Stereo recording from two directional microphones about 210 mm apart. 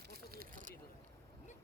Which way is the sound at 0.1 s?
45° right (ahead or behind).